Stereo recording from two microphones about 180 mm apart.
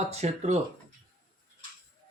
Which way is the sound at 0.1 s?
35° right (ahead or behind).